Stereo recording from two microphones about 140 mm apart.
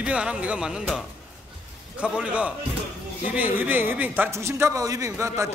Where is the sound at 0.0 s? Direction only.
5° right (ahead or behind).